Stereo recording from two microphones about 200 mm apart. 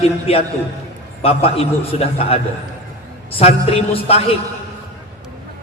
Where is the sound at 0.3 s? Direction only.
30° left (ahead or behind).